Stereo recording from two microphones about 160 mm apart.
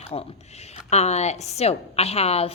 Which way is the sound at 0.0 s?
40° left (ahead or behind).